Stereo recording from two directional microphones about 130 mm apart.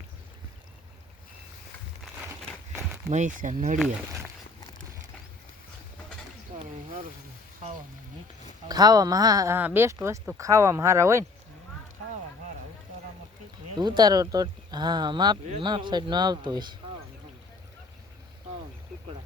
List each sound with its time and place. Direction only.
3.1 s speech: 70° right (ahead or behind)
6.5 s a sound: 55° right (ahead or behind)
8.6 s speech: 30° right (ahead or behind)
9.6 s speech: 15° right (ahead or behind)
13.7 s speech: 35° right (ahead or behind)